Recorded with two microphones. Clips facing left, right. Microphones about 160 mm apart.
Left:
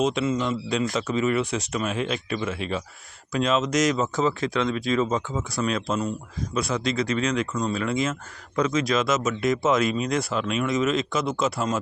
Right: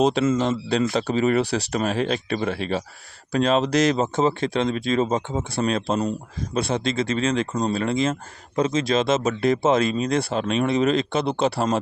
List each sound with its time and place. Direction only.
0.0 s speech: 35° right (ahead or behind)